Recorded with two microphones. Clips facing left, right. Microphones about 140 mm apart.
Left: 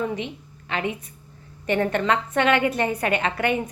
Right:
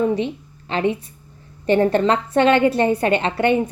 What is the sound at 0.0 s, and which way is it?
A woman's voice, 35° right (ahead or behind).